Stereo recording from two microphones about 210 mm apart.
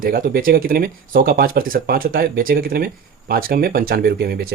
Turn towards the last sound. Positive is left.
turn(degrees=-50)  # may be behind; listen again after turning